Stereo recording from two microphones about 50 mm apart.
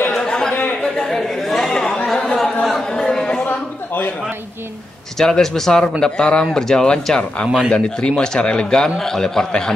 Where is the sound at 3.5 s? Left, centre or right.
Left.